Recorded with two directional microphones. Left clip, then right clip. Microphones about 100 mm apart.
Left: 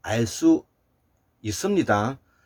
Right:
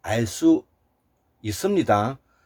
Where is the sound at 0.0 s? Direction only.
25° right (ahead or behind).